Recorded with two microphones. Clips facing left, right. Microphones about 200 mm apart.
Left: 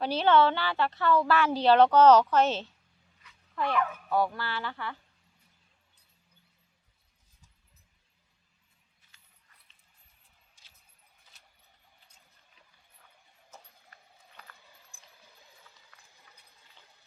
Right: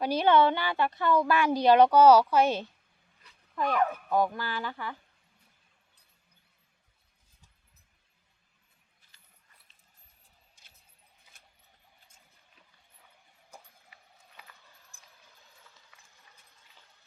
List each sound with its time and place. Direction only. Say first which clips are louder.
0.0 s a woman's voice: even; 10° right (ahead or behind)
11.3 s vehicle: right 1 dB; 50° right (ahead or behind)
13.5 s clip-clop: right 1 dB; 10° right (ahead or behind)